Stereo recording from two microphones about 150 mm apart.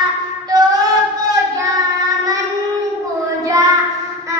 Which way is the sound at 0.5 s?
25° right (ahead or behind).